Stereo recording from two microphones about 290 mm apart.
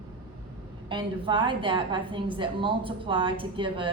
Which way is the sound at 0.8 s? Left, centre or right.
Centre.